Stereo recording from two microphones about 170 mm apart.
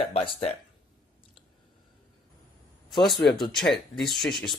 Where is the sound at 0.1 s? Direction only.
35° left (ahead or behind).